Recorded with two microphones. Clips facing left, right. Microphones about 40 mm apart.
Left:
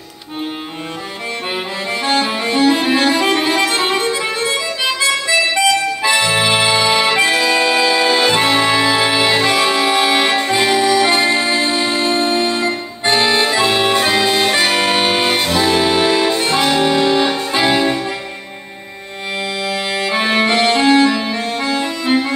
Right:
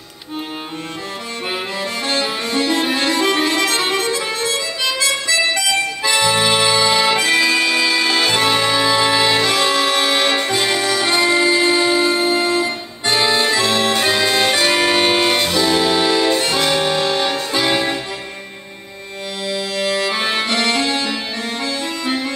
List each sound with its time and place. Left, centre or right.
2.0 s music: centre
7.3 s music: centre; by 12.6 s left
12.6 s accordion: centre
14.1 s music: centre; by 16.3 s left
16.3 s music: centre
17.6 s music: centre
19.9 s accordion: centre
21.6 s music: centre